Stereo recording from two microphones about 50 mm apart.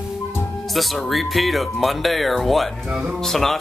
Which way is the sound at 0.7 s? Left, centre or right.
Centre.